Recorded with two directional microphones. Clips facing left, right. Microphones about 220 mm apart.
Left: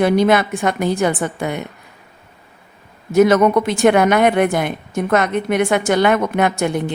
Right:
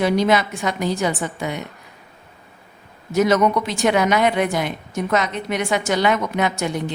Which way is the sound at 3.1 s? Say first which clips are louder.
Left 5 dB; 55° left (ahead or behind).